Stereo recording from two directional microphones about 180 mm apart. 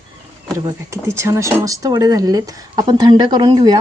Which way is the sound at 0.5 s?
15° right (ahead or behind).